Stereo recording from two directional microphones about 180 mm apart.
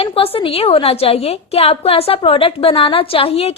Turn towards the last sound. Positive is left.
turn(degrees=35)  # may be behind; listen again after turning